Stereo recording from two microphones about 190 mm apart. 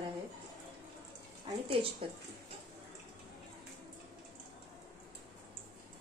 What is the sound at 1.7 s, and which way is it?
Speech, 30° right (ahead or behind).